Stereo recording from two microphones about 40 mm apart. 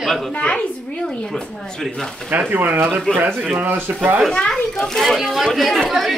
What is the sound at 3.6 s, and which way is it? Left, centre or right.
Speech, right.